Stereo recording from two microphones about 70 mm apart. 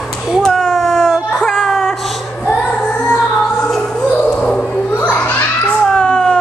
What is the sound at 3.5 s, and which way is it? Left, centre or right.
Music, centre.